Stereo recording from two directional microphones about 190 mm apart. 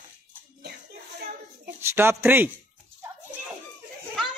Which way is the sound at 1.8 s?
15° right (ahead or behind).